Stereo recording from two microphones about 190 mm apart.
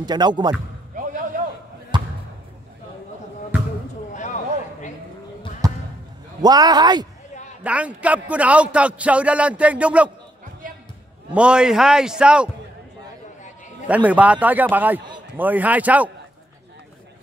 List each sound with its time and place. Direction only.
0.0 s a man's voice: 20° right (ahead or behind)
1.9 s basketball bounce: 25° right (ahead or behind)
4.1 s a sound: 40° left (ahead or behind)
5.6 s basketball bounce: 20° right (ahead or behind)
6.4 s a man's voice: 20° right (ahead or behind)
7.6 s a man's voice: 5° right (ahead or behind)
11.3 s a man's voice: 5° right (ahead or behind)
13.8 s a man's voice: 5° right (ahead or behind)